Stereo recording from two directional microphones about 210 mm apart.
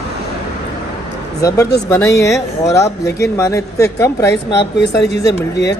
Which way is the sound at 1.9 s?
15° left (ahead or behind).